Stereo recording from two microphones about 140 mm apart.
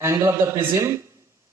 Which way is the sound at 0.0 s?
20° right (ahead or behind).